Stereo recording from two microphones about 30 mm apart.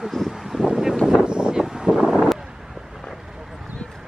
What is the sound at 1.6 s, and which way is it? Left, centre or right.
Wind noise, right.